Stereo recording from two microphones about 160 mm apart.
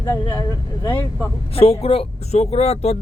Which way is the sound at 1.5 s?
40° left (ahead or behind).